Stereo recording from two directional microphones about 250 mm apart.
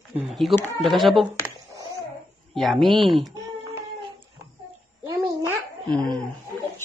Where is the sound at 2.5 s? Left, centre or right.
Centre.